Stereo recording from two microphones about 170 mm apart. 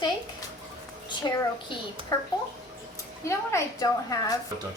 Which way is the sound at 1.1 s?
25° left (ahead or behind).